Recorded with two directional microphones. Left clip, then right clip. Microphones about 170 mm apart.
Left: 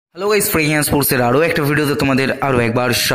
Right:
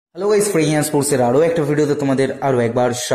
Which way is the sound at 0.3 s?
25° left (ahead or behind).